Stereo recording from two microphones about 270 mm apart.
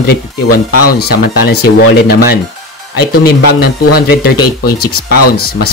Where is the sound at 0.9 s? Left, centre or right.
Left.